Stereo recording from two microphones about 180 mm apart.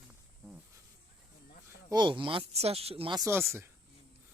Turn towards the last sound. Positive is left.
turn(degrees=-10)  # may be behind; listen again after turning